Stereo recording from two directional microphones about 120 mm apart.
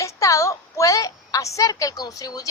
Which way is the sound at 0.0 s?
25° left (ahead or behind).